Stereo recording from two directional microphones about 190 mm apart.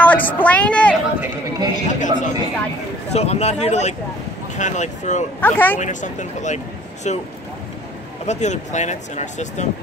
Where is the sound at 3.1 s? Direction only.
35° left (ahead or behind).